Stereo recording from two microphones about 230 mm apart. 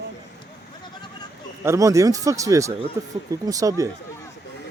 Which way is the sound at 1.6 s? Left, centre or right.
Centre.